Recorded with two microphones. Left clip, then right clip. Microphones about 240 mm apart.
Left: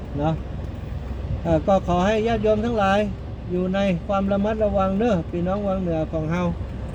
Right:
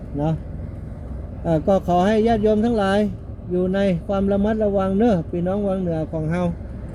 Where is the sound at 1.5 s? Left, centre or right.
Right.